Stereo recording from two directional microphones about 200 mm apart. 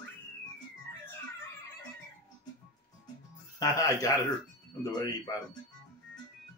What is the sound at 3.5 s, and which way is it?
A man's voice, 15° left (ahead or behind).